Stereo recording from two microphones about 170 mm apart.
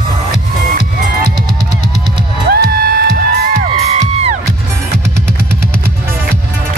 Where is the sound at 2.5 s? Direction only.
65° right (ahead or behind).